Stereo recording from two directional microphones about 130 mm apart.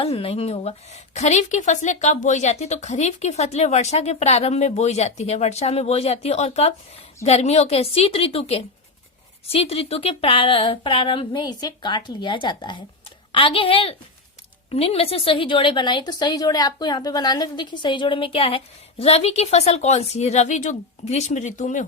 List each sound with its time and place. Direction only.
0.0 s a woman's voice: 50° left (ahead or behind); by 21.8 s 75° left (ahead or behind)